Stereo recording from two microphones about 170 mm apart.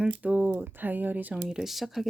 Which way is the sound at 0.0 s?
10° right (ahead or behind).